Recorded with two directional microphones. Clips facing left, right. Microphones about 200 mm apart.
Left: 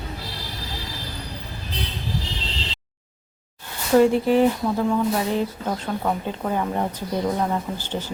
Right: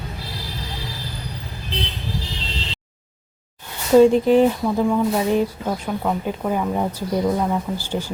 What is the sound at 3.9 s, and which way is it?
Speech, 15° right (ahead or behind).